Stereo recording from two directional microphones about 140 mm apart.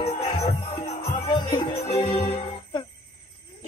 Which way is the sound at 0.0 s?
35° left (ahead or behind).